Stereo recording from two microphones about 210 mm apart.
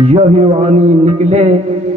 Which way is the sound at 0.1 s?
30° right (ahead or behind).